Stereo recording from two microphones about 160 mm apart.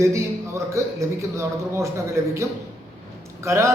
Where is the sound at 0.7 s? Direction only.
20° right (ahead or behind).